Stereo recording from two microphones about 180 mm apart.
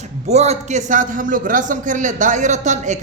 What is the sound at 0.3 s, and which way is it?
A man's voice, 35° right (ahead or behind).